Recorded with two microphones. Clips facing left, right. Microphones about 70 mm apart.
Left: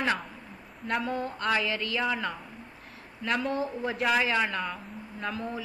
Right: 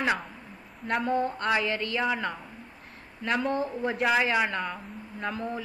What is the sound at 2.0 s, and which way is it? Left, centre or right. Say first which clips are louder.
A woman's voice: right 1 dB; centre.